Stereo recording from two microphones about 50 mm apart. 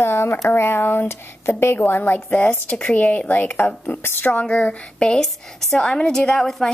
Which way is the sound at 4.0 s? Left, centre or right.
Left.